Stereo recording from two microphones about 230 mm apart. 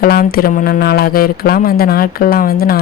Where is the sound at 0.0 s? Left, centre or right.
Left.